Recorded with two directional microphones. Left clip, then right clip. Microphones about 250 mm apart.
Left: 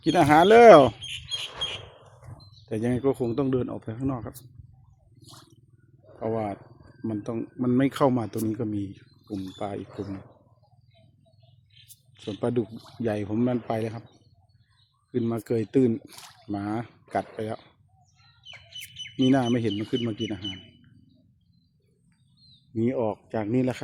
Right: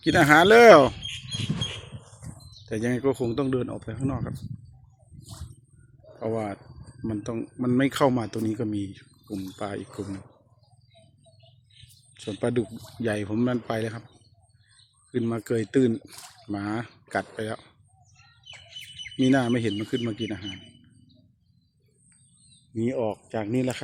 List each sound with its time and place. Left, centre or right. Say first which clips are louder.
0.0 s speech: right 1 dB; centre
2.6 s speech: even; centre
6.1 s speech: left 1 dB; centre
12.1 s speech: right 1 dB; centre
19.1 s speech: even; centre
22.7 s speech: left 1 dB; centre